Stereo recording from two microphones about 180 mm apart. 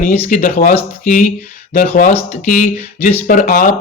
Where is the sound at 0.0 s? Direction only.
45° left (ahead or behind).